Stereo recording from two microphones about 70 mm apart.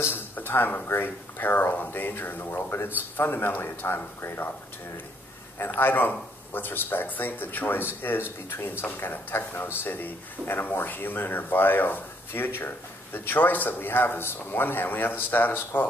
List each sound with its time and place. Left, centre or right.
0.0 s a sound: left
0.8 s a man's voice: left
5.6 s a man's voice: left